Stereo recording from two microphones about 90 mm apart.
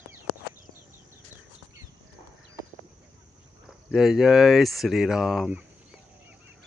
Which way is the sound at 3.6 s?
5° right (ahead or behind).